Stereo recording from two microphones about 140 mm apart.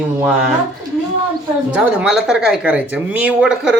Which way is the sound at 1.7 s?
10° right (ahead or behind).